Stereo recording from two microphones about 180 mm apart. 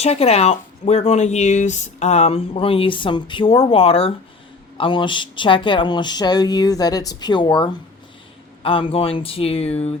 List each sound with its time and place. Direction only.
0.0 s speech: 35° left (ahead or behind)